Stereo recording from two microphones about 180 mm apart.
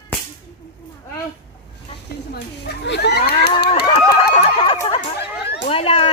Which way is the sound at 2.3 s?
65° left (ahead or behind).